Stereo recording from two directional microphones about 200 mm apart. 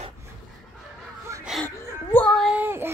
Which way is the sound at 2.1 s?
Centre (ahead or behind).